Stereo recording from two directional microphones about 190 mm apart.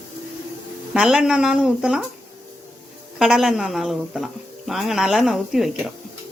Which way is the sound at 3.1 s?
5° right (ahead or behind).